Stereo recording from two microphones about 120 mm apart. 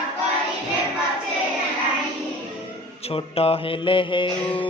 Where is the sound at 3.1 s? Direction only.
55° left (ahead or behind).